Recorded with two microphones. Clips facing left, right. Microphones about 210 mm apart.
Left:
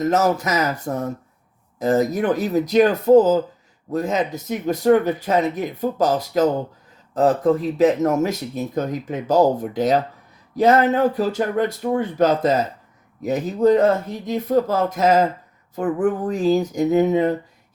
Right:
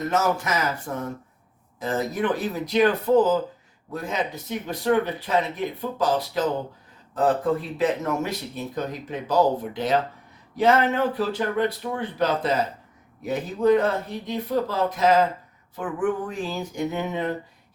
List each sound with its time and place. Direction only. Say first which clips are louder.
0.0 s speech: left 5 dB; 40° left (ahead or behind)